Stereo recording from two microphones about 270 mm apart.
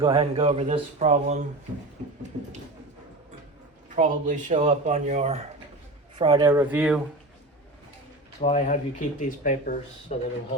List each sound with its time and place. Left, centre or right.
0.0 s speech: centre
3.8 s speech: right; by 7.0 s centre
8.4 s speech: left